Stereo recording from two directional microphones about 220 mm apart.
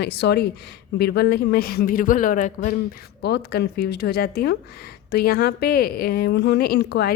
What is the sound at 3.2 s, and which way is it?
Speech, 50° left (ahead or behind).